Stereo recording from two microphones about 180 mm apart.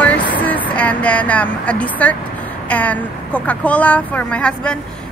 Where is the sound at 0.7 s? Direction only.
10° left (ahead or behind).